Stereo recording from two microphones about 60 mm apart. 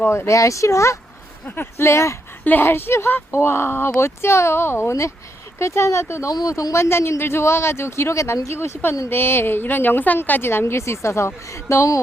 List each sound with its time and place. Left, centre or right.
0.1 s speech: left
1.5 s speech: left
1.8 s speech: left
2.4 s speech: left
2.6 s speech: left
6.8 s speech: left
9.0 s speech: left